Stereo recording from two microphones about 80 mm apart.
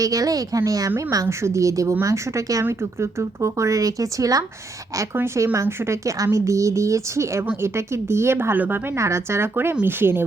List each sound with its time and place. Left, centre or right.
0.0 s a woman's voice: right
5.1 s a woman's voice: right
9.0 s a woman's voice: right